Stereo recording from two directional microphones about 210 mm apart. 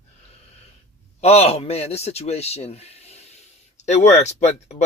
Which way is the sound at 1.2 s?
30° left (ahead or behind).